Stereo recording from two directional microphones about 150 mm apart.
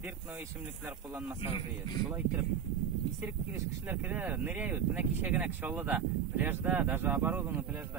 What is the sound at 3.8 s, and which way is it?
Speech, 15° right (ahead or behind).